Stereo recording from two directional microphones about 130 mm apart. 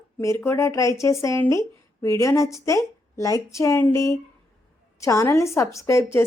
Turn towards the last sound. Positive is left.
turn(degrees=20)  # may be behind; listen again after turning